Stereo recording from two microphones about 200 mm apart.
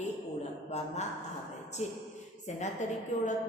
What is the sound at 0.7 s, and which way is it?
A woman's voice, 35° left (ahead or behind).